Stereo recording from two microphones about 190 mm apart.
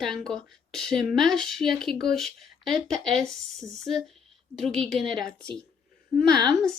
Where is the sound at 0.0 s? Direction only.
Centre (ahead or behind).